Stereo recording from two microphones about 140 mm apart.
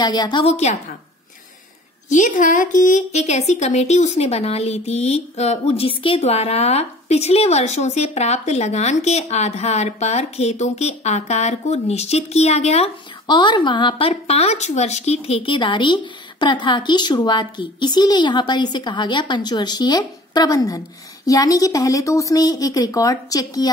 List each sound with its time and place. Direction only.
0.0 s speech: 30° left (ahead or behind)
0.4 s a woman's voice: 50° left (ahead or behind)
2.0 s a woman's voice: 65° left (ahead or behind); by 12.9 s 50° left (ahead or behind)
13.3 s speech: 30° left (ahead or behind)